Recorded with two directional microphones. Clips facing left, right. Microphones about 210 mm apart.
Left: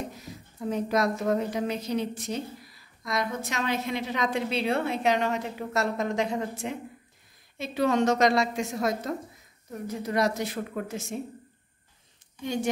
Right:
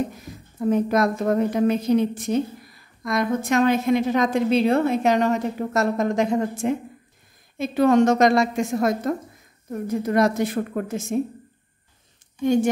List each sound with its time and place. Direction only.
0.2 s a woman's voice: 55° right (ahead or behind)